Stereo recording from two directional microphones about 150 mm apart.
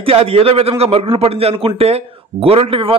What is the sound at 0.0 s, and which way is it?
A man's voice, 40° right (ahead or behind).